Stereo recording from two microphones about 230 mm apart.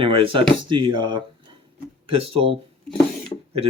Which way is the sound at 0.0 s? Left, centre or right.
Right.